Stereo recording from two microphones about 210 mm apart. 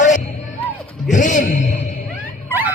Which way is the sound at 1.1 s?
35° left (ahead or behind).